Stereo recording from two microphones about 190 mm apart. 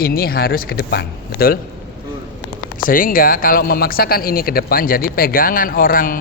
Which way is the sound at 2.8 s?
45° left (ahead or behind).